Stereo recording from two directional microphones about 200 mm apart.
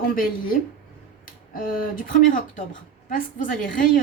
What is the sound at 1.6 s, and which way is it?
Speech, 45° left (ahead or behind).